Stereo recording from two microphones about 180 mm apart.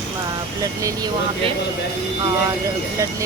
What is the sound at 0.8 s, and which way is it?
Speech, 20° right (ahead or behind).